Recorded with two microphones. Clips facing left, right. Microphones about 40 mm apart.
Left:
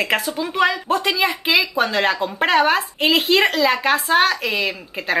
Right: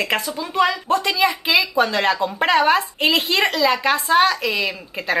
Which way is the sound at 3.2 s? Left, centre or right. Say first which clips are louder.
Left 2 dB; centre.